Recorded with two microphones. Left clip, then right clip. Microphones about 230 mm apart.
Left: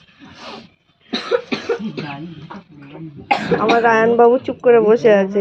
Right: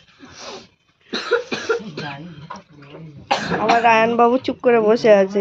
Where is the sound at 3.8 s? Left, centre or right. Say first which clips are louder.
Left 3 dB; right.